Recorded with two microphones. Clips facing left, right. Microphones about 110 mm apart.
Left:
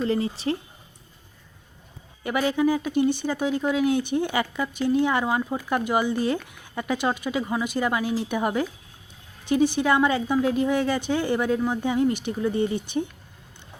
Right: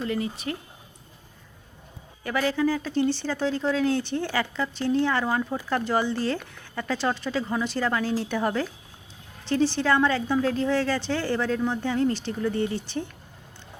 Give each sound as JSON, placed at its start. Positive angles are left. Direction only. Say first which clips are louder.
{"t": 0.0, "sound": "speech", "louder": "left 4 dB", "side_deg": 30}
{"t": 2.2, "sound": "speech", "louder": "left 2 dB", "side_deg": 20}